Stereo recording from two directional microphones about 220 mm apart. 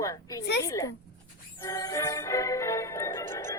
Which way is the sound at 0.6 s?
15° left (ahead or behind).